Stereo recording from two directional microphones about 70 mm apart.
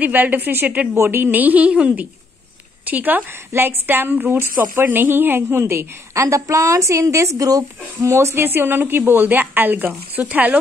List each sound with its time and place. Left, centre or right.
0.0 s a woman's voice: right